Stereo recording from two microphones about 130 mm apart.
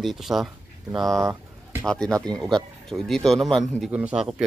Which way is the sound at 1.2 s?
20° right (ahead or behind).